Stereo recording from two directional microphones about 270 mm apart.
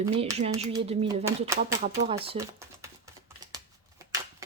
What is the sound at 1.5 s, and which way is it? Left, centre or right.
Speech, right.